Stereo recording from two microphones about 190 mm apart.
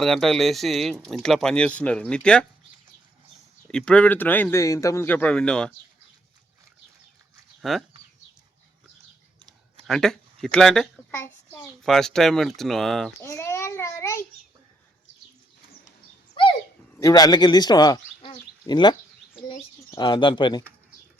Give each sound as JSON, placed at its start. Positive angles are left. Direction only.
{"t": 0.0, "sound": "a child's voice", "side_deg": 0}
{"t": 3.7, "sound": "speech", "side_deg": 5}
{"t": 7.6, "sound": "speech", "side_deg": 0}
{"t": 9.4, "sound": "clicking", "side_deg": -25}
{"t": 9.8, "sound": "a child's voice", "side_deg": 0}
{"t": 13.2, "sound": "a sound", "side_deg": 15}
{"t": 16.3, "sound": "horse", "side_deg": 25}
{"t": 17.0, "sound": "a child's voice", "side_deg": 20}